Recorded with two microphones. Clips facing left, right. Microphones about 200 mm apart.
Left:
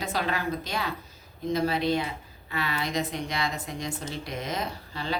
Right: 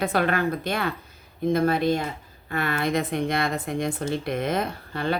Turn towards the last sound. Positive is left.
turn(degrees=-55)  # may be behind; listen again after turning